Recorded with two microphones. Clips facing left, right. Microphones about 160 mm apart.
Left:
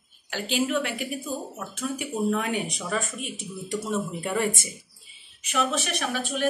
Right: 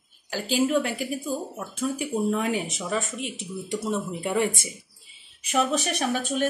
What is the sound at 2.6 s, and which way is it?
Speech, 20° right (ahead or behind).